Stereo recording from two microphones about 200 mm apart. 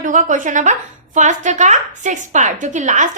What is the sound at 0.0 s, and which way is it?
A woman's voice, 40° right (ahead or behind).